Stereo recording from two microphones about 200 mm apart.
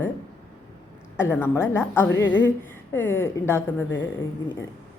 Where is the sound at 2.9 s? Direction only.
10° left (ahead or behind).